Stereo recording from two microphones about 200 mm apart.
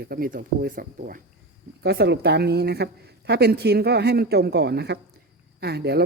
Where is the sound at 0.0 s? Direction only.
50° right (ahead or behind).